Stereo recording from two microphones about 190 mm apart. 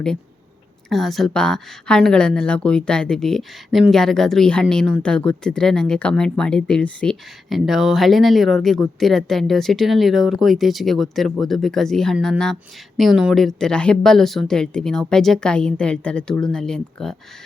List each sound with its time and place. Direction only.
0.9 s speech: centre (ahead or behind)